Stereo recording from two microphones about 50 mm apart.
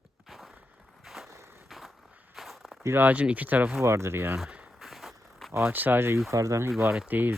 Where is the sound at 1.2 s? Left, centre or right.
Right.